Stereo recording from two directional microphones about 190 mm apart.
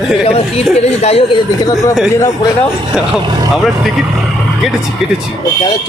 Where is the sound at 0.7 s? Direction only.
35° left (ahead or behind).